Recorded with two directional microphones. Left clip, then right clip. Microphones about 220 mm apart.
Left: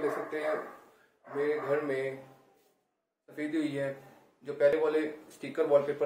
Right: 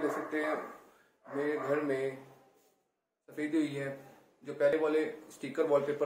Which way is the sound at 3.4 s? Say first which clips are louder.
Even; 20° right (ahead or behind).